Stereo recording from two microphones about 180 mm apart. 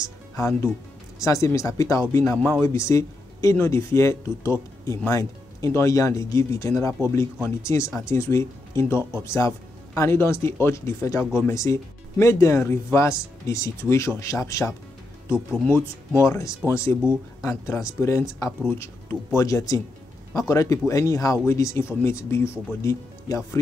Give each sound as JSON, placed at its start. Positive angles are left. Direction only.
{"t": 0.4, "sound": "speech", "side_deg": 15}
{"t": 2.3, "sound": "speech", "side_deg": 0}
{"t": 2.6, "sound": "speech", "side_deg": 15}
{"t": 15.3, "sound": "speech", "side_deg": -5}
{"t": 16.2, "sound": "speech", "side_deg": 15}